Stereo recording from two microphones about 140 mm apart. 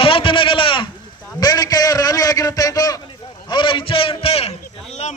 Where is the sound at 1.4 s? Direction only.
30° left (ahead or behind).